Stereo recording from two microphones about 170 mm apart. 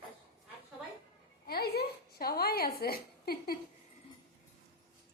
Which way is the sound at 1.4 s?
70° left (ahead or behind).